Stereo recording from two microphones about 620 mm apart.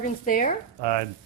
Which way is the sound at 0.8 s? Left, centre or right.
Right.